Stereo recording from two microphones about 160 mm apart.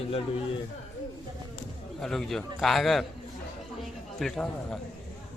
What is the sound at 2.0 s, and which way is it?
A woman's voice, centre (ahead or behind).